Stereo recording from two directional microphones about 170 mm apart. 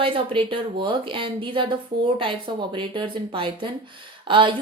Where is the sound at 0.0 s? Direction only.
30° right (ahead or behind).